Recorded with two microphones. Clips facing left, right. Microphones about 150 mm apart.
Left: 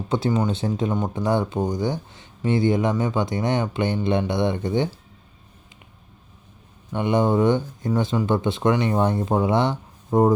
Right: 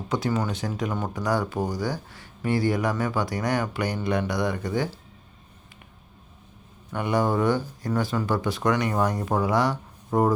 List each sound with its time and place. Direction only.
0.1 s speech: 25° left (ahead or behind)
6.9 s speech: 20° left (ahead or behind)